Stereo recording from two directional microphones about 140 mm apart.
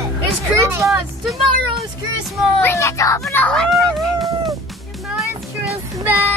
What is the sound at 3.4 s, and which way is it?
Children playing, 5° left (ahead or behind).